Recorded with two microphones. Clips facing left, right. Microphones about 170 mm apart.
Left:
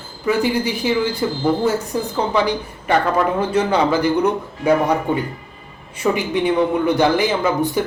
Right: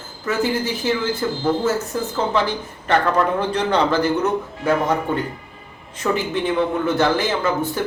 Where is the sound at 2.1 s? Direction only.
15° left (ahead or behind).